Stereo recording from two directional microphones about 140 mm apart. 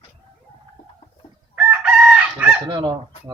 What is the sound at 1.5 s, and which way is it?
Chicken, 10° right (ahead or behind).